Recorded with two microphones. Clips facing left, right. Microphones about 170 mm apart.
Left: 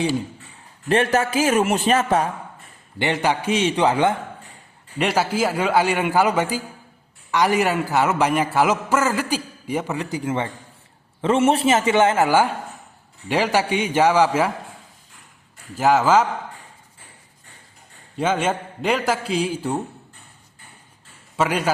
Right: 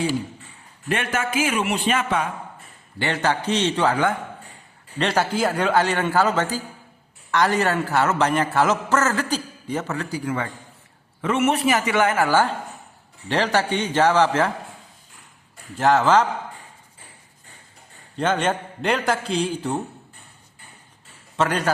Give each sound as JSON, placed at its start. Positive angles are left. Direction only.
{"t": 0.9, "sound": "a man's voice", "side_deg": 35}
{"t": 3.0, "sound": "a man's voice", "side_deg": 15}
{"t": 4.9, "sound": "a man's voice", "side_deg": 10}
{"t": 15.8, "sound": "a man's voice", "side_deg": 10}
{"t": 18.2, "sound": "a man's voice", "side_deg": 5}
{"t": 21.3, "sound": "a man's voice", "side_deg": 10}